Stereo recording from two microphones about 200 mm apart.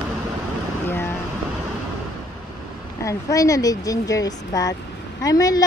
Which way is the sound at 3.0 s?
15° left (ahead or behind).